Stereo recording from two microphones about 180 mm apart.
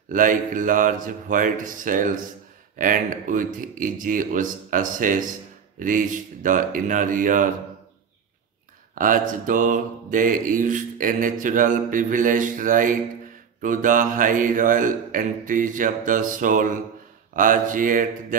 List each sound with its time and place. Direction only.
0.1 s mantra: 50° right (ahead or behind)
8.9 s mantra: 50° right (ahead or behind)